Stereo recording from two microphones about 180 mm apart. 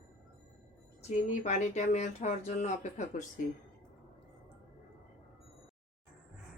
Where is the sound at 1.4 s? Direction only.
40° left (ahead or behind).